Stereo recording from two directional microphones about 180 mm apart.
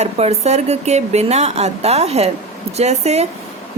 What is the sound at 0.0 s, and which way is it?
Speech, 35° right (ahead or behind).